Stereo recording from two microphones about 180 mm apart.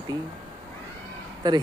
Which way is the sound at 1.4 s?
20° right (ahead or behind).